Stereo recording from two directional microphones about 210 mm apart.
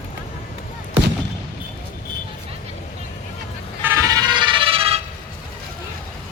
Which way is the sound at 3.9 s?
20° right (ahead or behind).